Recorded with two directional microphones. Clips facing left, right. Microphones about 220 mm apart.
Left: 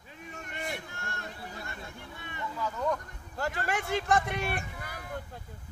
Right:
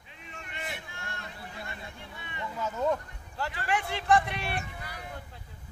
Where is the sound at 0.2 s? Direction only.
45° left (ahead or behind).